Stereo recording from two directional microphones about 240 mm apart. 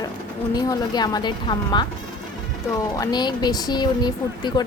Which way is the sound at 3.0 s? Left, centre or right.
Centre.